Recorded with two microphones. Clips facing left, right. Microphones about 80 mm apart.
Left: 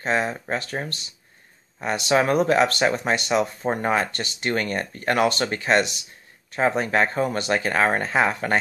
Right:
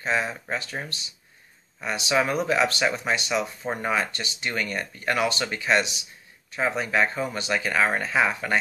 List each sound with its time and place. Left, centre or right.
0.0 s speech: left
1.8 s speech: left